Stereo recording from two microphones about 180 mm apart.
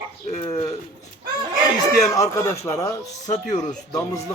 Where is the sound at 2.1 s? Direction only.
15° left (ahead or behind).